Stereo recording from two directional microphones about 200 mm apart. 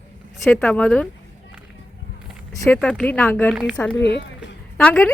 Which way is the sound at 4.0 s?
60° left (ahead or behind).